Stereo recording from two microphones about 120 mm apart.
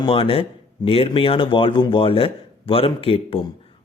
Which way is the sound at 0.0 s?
50° left (ahead or behind).